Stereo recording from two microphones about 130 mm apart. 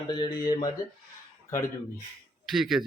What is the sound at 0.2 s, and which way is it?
Speech, 30° left (ahead or behind).